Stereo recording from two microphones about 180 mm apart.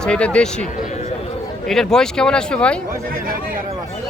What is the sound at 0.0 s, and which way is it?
Speech, 5° left (ahead or behind).